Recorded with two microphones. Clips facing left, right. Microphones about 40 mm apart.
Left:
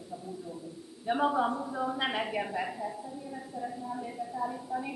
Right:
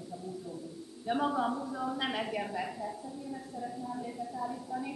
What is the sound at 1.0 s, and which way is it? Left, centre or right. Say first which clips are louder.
A woman's voice: left 3 dB; centre.